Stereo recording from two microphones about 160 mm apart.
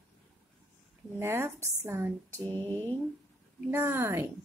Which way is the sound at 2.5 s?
15° left (ahead or behind).